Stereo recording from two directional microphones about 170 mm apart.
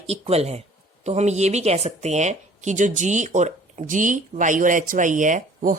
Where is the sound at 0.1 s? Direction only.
35° right (ahead or behind).